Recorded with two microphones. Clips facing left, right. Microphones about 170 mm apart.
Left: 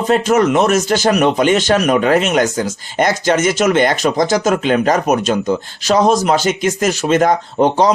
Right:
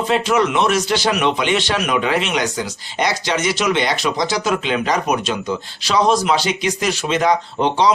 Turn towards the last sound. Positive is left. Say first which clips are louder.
# left 4 dB
turn(degrees=45)  # may be behind; listen again after turning